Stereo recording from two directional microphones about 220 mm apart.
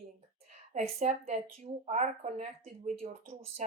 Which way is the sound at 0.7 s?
30° right (ahead or behind).